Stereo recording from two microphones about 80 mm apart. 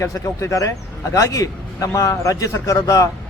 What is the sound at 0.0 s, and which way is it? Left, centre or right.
A man's voice, left.